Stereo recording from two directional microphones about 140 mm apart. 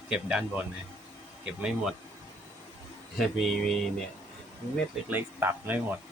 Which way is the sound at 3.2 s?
Centre (ahead or behind).